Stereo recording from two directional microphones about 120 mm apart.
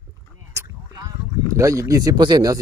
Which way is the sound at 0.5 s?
30° right (ahead or behind).